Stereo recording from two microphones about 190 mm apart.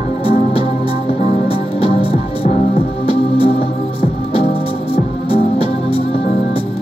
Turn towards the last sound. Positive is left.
turn(degrees=30)  # may be behind; listen again after turning